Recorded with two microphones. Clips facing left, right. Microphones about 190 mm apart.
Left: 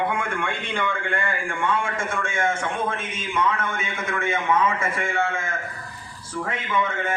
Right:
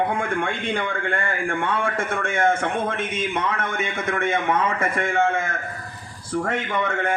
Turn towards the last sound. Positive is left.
turn(degrees=-70)  # may be behind; listen again after turning